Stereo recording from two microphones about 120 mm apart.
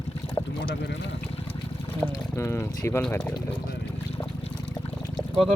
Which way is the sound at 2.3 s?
25° left (ahead or behind).